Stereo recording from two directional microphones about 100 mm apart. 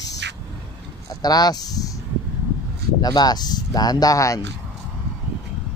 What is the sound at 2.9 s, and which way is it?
Speech, 40° left (ahead or behind).